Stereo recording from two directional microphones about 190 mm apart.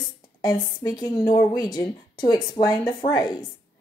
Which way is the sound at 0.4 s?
20° left (ahead or behind).